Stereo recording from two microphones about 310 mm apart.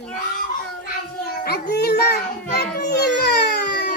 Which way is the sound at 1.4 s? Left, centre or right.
Left.